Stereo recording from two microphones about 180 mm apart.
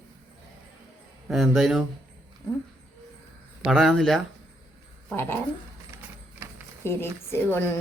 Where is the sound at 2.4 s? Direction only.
20° left (ahead or behind).